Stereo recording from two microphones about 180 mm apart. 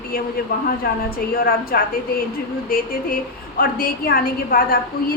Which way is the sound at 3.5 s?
55° left (ahead or behind).